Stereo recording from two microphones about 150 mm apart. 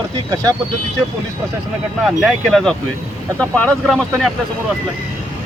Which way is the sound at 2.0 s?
Centre (ahead or behind).